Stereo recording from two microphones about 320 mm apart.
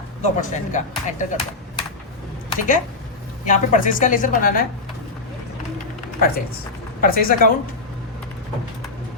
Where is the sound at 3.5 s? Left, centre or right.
Left.